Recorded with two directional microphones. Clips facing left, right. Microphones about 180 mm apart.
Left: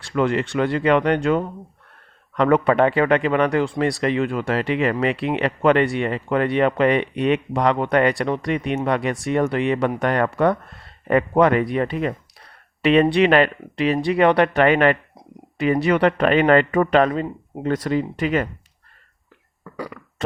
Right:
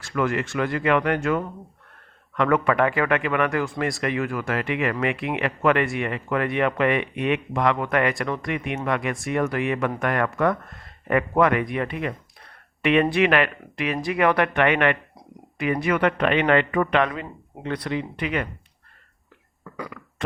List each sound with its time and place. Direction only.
0.0 s speech: 30° left (ahead or behind)
19.7 s burping: 35° left (ahead or behind)